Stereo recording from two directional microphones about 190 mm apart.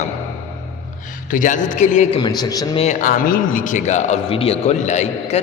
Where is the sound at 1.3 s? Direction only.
45° left (ahead or behind); by 2.8 s 20° left (ahead or behind).